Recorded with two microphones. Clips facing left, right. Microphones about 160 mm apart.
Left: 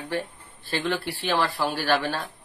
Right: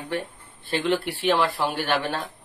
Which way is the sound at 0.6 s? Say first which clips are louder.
Right 3 dB; 20° right (ahead or behind).